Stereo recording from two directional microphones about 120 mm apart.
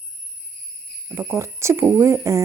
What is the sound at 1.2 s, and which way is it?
Speech, 20° right (ahead or behind).